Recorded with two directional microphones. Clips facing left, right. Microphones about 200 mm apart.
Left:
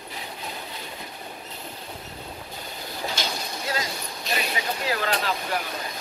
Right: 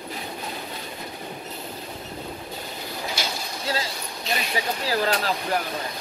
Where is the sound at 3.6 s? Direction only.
30° right (ahead or behind).